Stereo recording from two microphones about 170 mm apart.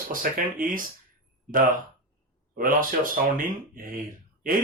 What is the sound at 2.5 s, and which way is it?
Speech, 55° right (ahead or behind).